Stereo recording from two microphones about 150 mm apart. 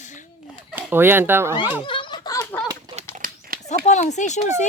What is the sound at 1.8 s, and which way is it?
Snicker, 35° left (ahead or behind).